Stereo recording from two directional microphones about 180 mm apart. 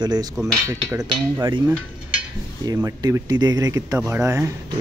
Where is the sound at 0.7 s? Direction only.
20° right (ahead or behind).